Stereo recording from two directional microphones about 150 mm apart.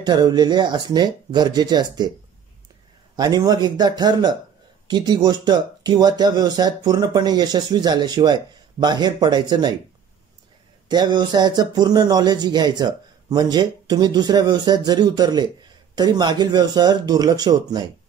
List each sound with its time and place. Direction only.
0.0 s speech: 30° right (ahead or behind)
3.2 s speech: 25° right (ahead or behind)
10.9 s speech: 30° right (ahead or behind)